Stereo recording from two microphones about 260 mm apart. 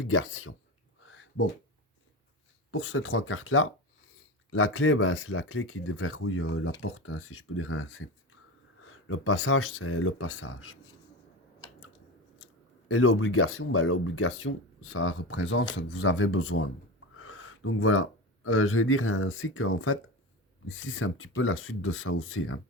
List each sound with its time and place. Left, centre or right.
0.0 s speech: left
1.0 s a sound: left
2.7 s speech: left
12.9 s speech: left